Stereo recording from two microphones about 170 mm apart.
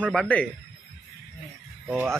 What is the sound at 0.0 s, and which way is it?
Speech, 5° left (ahead or behind).